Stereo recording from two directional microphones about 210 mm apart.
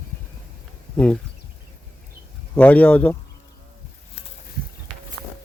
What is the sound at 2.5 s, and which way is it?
Speech, 5° left (ahead or behind).